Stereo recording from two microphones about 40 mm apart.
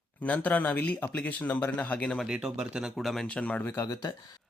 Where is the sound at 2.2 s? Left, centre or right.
Centre.